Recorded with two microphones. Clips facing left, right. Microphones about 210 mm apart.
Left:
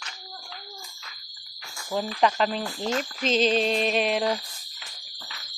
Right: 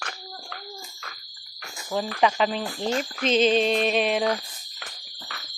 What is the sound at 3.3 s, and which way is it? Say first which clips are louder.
Music: right 2 dB; centre (ahead or behind).